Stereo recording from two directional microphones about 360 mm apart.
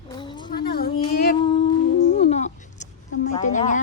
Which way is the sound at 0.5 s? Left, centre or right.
Left.